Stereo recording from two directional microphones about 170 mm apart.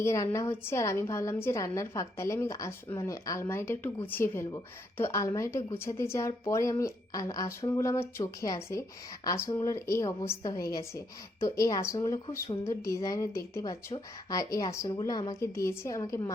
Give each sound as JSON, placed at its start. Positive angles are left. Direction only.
{"t": 0.0, "sound": "a woman's voice", "side_deg": 15}